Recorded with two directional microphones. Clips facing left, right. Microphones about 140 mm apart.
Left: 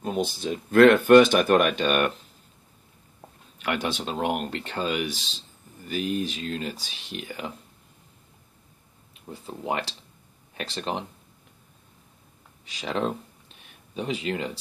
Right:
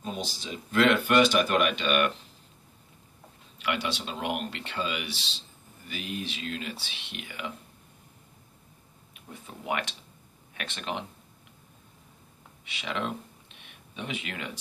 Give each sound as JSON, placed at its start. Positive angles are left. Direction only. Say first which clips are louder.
{"t": 0.0, "sound": "speech", "louder": "left 8 dB", "side_deg": 55}
{"t": 3.5, "sound": "speech", "louder": "left 3 dB", "side_deg": 50}
{"t": 9.1, "sound": "speech", "louder": "left 6 dB", "side_deg": 30}
{"t": 12.6, "sound": "speech", "louder": "left 5 dB", "side_deg": 40}